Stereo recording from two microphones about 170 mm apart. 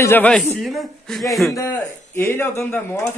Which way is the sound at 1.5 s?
15° left (ahead or behind).